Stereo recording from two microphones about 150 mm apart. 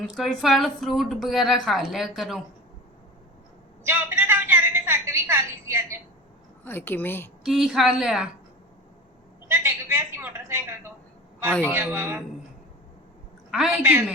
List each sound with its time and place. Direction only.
0.0 s a woman's voice: centre (ahead or behind)
3.8 s a sound: 15° right (ahead or behind)
6.7 s a woman's voice: 15° left (ahead or behind)
7.4 s a woman's voice: centre (ahead or behind)
9.5 s a sound: 15° right (ahead or behind)
11.7 s a woman's voice: 10° right (ahead or behind)
13.5 s a woman's voice: 5° right (ahead or behind)